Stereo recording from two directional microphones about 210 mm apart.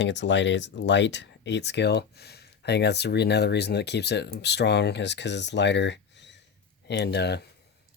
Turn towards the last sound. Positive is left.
turn(degrees=50)  # may be behind; listen again after turning